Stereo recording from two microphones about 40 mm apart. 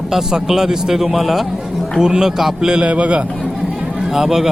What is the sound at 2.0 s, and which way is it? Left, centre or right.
A man's voice, centre.